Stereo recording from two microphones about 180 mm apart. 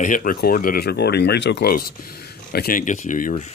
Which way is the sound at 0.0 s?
50° left (ahead or behind).